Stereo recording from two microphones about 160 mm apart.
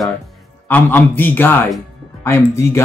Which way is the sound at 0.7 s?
10° left (ahead or behind).